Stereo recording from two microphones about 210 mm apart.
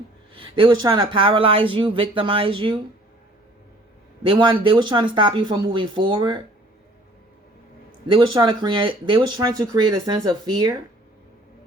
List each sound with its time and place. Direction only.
0.3 s speech: 25° right (ahead or behind)
4.3 s speech: 25° right (ahead or behind)
8.0 s speech: 20° right (ahead or behind)